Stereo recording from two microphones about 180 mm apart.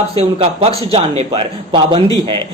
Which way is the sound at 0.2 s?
35° right (ahead or behind).